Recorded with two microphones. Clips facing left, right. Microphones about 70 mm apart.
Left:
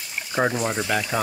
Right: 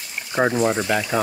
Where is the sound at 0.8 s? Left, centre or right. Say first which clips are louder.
Right 3 dB; centre.